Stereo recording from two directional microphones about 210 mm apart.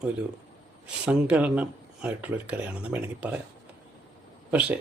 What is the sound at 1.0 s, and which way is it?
Speech, 5° right (ahead or behind).